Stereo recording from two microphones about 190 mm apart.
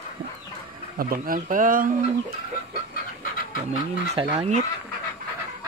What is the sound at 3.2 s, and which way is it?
Pant, 45° left (ahead or behind).